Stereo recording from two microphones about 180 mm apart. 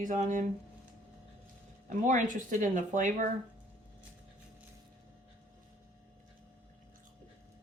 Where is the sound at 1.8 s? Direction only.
45° right (ahead or behind).